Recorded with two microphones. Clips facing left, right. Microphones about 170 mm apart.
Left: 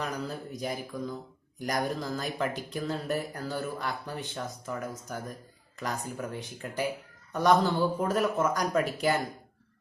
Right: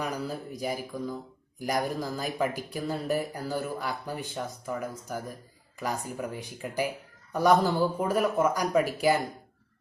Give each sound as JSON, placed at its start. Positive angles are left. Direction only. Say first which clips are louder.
{"t": 0.0, "sound": "speech", "louder": "right 2 dB", "side_deg": -10}